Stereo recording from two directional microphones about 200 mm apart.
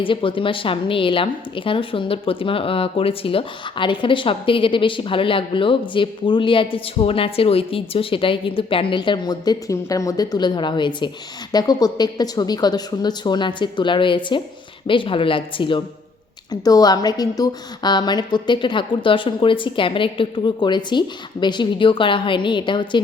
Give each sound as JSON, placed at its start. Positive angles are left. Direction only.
{"t": 0.0, "sound": "a woman's voice", "side_deg": 25}